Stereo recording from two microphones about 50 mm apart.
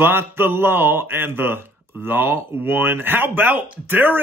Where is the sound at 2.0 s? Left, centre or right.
Right.